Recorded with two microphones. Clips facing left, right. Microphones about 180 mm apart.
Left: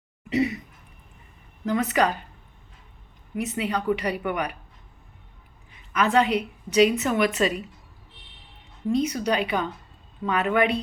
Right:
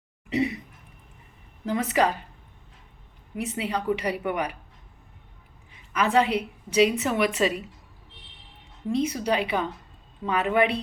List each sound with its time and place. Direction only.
0.3 s a woman's voice: 30° right (ahead or behind)
1.6 s a woman's voice: 30° right (ahead or behind)
3.3 s a woman's voice: 30° right (ahead or behind)
5.9 s a woman's voice: 30° right (ahead or behind)
8.9 s a woman's voice: 30° right (ahead or behind)